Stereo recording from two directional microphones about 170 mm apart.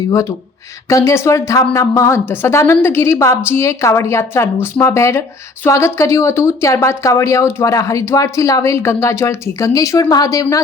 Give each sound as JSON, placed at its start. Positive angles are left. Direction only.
{"t": 0.1, "sound": "speech", "side_deg": 15}